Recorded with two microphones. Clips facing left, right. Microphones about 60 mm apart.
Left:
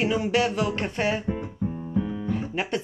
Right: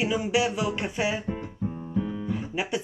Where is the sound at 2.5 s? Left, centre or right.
Left.